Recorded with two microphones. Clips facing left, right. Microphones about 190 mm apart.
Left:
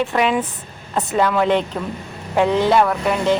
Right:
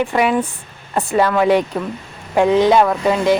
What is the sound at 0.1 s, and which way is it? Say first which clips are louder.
Speech: right 2 dB; 5° right (ahead or behind).